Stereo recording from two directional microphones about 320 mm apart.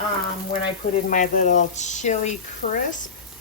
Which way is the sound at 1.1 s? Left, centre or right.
Left.